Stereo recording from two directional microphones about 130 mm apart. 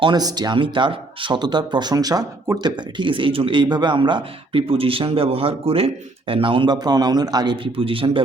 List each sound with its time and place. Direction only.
0.0 s speech: 35° right (ahead or behind)